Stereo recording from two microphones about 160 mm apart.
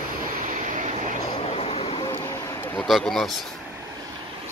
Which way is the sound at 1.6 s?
40° left (ahead or behind).